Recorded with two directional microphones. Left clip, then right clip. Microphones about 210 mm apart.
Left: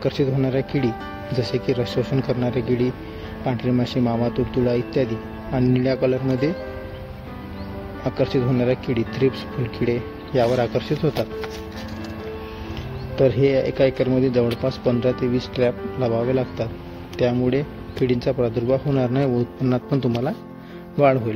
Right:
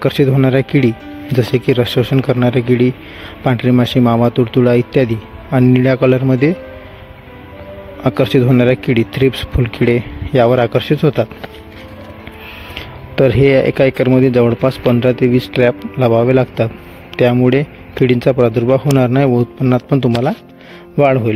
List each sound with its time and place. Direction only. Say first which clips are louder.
0.0 s speech: right 9 dB; 45° right (ahead or behind)
8.0 s speech: right 9 dB; 45° right (ahead or behind)
12.7 s speech: right 8 dB; 45° right (ahead or behind)